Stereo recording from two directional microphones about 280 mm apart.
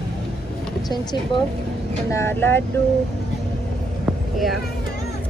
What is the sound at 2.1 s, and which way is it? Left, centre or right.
Speech, centre.